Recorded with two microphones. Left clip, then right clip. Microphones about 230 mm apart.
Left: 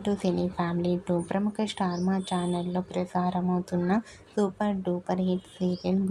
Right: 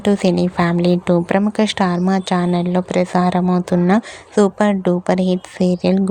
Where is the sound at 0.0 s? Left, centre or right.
Right.